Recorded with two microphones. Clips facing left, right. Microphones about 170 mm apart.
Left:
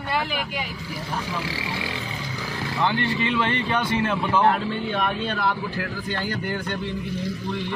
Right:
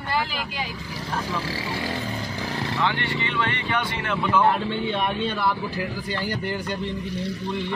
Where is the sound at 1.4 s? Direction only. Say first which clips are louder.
Right 1 dB; 40° right (ahead or behind).